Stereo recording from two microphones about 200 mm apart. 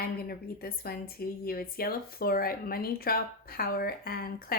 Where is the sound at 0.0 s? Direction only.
50° left (ahead or behind).